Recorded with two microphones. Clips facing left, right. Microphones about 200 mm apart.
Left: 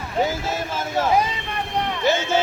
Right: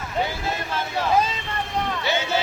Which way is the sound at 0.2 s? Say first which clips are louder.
Left 4 dB; 45° left (ahead or behind).